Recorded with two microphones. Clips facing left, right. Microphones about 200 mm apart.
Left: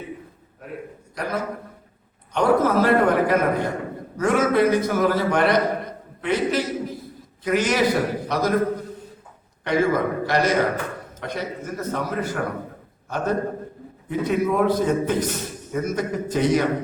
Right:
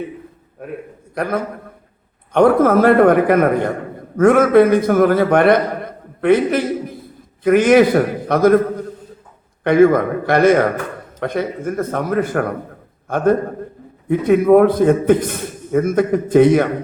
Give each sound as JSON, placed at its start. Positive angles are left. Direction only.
{"t": 1.1, "sound": "a man's voice", "side_deg": -55}
{"t": 9.6, "sound": "a man's voice", "side_deg": -55}